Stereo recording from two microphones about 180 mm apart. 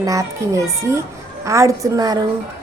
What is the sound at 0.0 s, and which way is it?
A child's voice, 20° right (ahead or behind).